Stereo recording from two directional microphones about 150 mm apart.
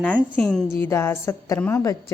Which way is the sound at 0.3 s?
5° left (ahead or behind).